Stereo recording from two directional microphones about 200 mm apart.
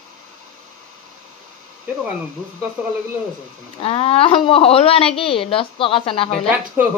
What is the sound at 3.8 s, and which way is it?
A woman's voice, 30° left (ahead or behind).